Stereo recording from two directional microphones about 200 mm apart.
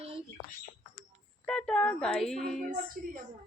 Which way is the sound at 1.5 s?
5° left (ahead or behind).